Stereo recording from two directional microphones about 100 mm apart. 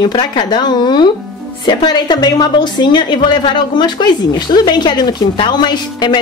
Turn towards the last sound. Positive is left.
turn(degrees=50)  # may be behind; listen again after turning